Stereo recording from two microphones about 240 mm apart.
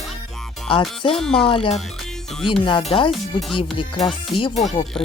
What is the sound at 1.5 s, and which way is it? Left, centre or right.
Speech, left.